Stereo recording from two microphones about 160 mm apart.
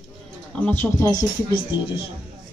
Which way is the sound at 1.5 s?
85° left.